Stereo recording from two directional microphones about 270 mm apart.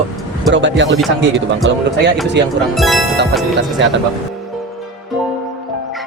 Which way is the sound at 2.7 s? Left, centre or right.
Centre.